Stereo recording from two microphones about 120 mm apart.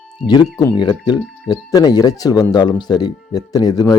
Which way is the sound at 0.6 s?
40° left (ahead or behind).